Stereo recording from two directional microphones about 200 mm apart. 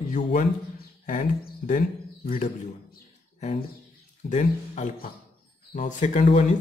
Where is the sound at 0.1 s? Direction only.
40° left (ahead or behind).